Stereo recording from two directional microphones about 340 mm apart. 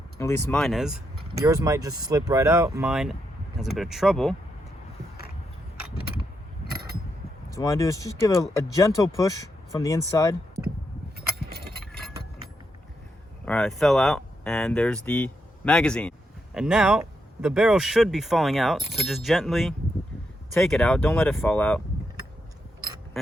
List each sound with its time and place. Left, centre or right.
0.2 s speech: centre
6.7 s a sound: right
7.5 s speech: centre
11.3 s keys jangling: right
11.9 s a sound: centre
13.4 s speech: centre